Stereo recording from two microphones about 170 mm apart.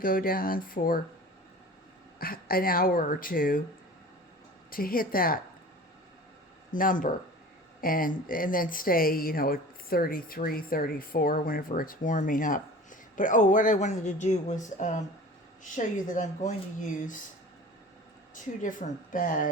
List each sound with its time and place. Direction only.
0.0 s speech: 55° left (ahead or behind)
2.1 s speech: 60° left (ahead or behind)
4.7 s speech: 55° left (ahead or behind)
6.7 s speech: 50° left (ahead or behind)
18.3 s speech: 50° left (ahead or behind)